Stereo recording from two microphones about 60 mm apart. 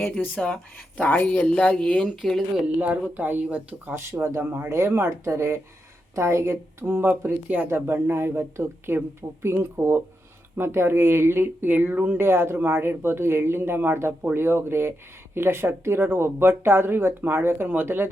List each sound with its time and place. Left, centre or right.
0.3 s speech: left
2.8 s speech: right
3.8 s speech: right
7.7 s speech: right
12.2 s speech: right